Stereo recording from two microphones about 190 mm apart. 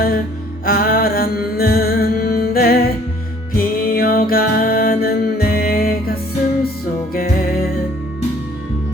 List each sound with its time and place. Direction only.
0.6 s music: 50° left (ahead or behind)